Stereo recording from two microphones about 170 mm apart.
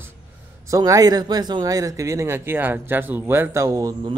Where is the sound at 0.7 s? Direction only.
20° right (ahead or behind).